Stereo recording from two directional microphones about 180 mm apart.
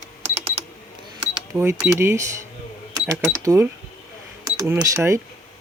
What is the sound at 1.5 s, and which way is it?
Speech, 15° right (ahead or behind).